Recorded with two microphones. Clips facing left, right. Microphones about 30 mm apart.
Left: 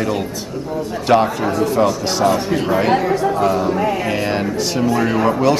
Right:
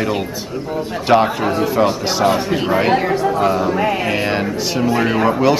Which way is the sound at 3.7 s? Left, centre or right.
Right.